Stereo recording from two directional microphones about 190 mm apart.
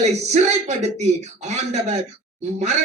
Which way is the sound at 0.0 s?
35° right (ahead or behind).